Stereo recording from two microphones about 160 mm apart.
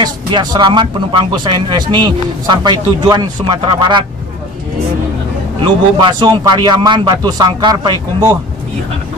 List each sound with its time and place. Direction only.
0.0 s a man's voice: 25° right (ahead or behind)
5.6 s a man's voice: 30° right (ahead or behind)